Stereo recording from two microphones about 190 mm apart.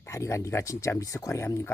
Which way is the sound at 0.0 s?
15° left (ahead or behind).